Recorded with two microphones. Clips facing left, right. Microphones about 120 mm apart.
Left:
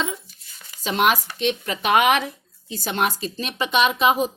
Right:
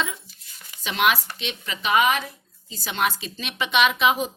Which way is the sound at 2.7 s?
50° left (ahead or behind).